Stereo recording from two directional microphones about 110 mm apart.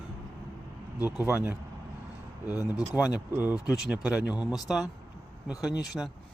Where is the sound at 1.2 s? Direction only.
20° right (ahead or behind).